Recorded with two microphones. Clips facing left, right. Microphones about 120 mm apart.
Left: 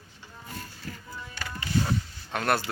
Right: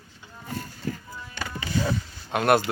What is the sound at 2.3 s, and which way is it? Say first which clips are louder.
Speech: right 6 dB; 15° right (ahead or behind).